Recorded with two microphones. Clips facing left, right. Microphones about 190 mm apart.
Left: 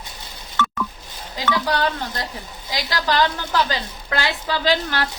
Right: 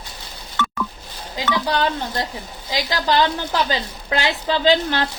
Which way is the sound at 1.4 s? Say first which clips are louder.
Right 1 dB; 15° right (ahead or behind).